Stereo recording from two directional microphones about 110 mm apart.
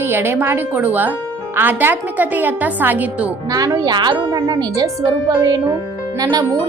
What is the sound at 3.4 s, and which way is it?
Speech, 35° right (ahead or behind).